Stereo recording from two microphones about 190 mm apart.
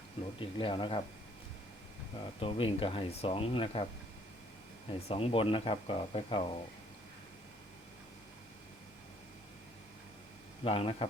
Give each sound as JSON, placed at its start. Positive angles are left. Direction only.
{"t": 0.3, "sound": "speech", "side_deg": 25}
{"t": 2.4, "sound": "speech", "side_deg": 30}
{"t": 4.9, "sound": "speech", "side_deg": 30}
{"t": 10.6, "sound": "speech", "side_deg": 30}